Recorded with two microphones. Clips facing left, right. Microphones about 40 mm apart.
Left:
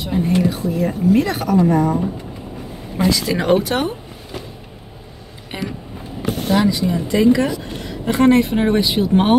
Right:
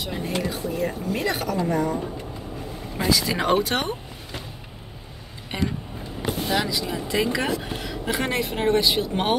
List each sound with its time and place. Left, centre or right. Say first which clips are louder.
0.0 s speech: left 9 dB; centre
3.1 s speech: left 4 dB; centre
6.2 s vehicle: left 4 dB; left
6.6 s speech: left 9 dB; centre
7.1 s speech: left 9 dB; centre